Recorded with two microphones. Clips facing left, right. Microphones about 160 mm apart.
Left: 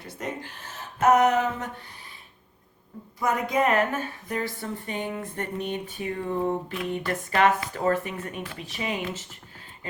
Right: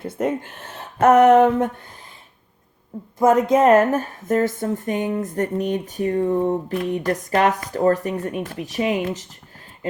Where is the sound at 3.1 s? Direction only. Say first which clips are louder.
Right 9 dB; 45° right (ahead or behind).